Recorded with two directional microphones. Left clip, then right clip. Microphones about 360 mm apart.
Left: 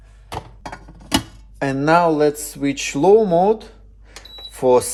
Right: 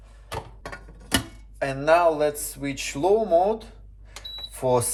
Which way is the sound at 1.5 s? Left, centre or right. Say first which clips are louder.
Left 4 dB; left.